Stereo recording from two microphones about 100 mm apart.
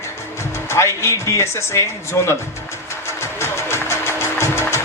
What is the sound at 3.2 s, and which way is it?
Music, 25° left (ahead or behind).